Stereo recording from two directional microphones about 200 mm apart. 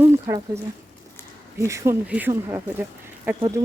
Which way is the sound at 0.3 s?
15° right (ahead or behind).